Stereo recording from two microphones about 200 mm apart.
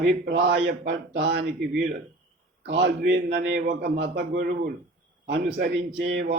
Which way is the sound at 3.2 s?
45° right (ahead or behind).